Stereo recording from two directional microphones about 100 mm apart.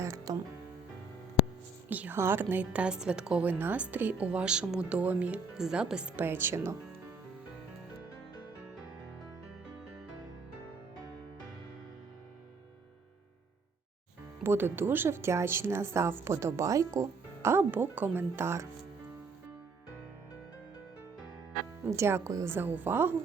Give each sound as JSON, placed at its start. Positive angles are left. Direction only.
{"t": 0.0, "sound": "music", "side_deg": -35}
{"t": 1.9, "sound": "a woman's voice", "side_deg": -20}
{"t": 6.2, "sound": "speech", "side_deg": -20}
{"t": 14.4, "sound": "speech", "side_deg": -25}
{"t": 21.8, "sound": "speech", "side_deg": -25}
{"t": 22.5, "sound": "speech", "side_deg": -20}